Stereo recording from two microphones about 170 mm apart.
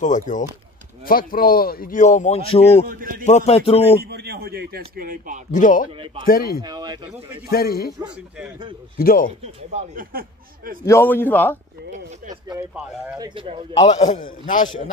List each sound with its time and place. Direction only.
0.0 s speech: 45° left (ahead or behind)
2.9 s speech: 55° right (ahead or behind)
3.3 s a man's voice: 40° left (ahead or behind)
4.0 s speech: 75° right (ahead or behind); by 5.4 s 55° right (ahead or behind)
5.5 s speech: 50° left (ahead or behind)
6.2 s a man's voice: 60° left (ahead or behind)
6.6 s speech: 25° right (ahead or behind)
7.4 s a man's voice: 65° left (ahead or behind)
8.9 s a man's voice: 60° left (ahead or behind)
9.4 s speech: 45° right (ahead or behind)
10.9 s a man's voice: 15° left (ahead or behind)
13.2 s speech: 30° right (ahead or behind)
13.9 s speech: 45° left (ahead or behind)